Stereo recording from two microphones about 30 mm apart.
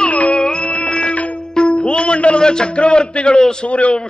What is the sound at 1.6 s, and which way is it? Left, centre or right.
Music, left.